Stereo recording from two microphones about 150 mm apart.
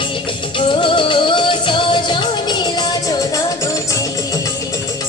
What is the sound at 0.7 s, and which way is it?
Music, 35° left (ahead or behind).